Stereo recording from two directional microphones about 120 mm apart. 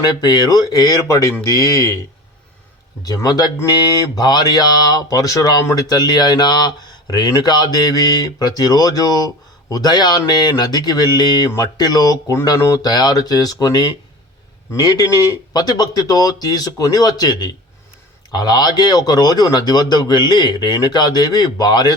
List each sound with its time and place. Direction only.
0.2 s speech: 35° left (ahead or behind)
3.0 s speech: 30° left (ahead or behind)